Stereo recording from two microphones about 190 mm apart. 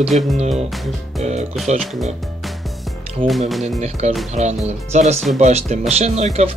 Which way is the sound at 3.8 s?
35° right (ahead or behind).